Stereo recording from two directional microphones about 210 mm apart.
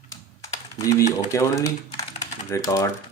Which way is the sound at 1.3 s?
15° left (ahead or behind).